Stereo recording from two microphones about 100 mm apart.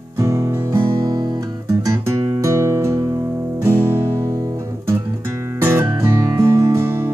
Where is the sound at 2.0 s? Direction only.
35° right (ahead or behind).